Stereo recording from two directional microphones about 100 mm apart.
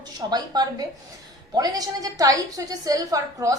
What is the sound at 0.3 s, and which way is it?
A woman's voice, 45° right (ahead or behind).